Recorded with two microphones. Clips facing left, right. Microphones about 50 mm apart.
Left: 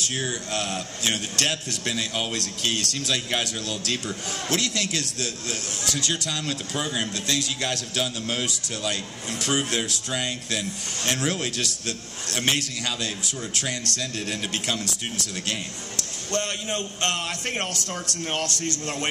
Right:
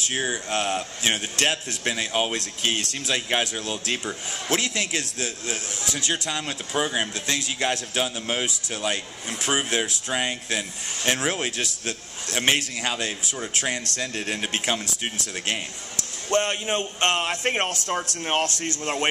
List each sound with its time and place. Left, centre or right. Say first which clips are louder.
0.1 s a man's voice: right 6 dB; right